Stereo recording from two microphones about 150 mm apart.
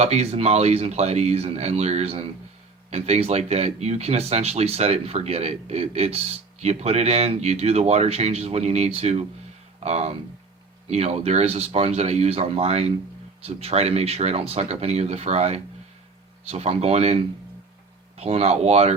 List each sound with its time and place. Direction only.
0.0 s speech: 45° right (ahead or behind)
18.2 s speech: 45° right (ahead or behind)